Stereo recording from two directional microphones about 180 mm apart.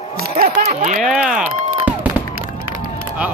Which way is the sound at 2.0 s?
10° right (ahead or behind).